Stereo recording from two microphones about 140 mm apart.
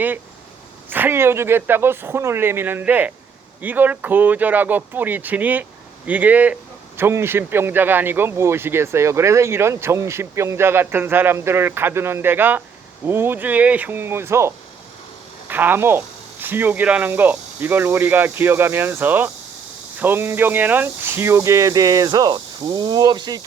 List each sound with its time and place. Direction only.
0.9 s speech: 15° right (ahead or behind); by 23.4 s 30° right (ahead or behind)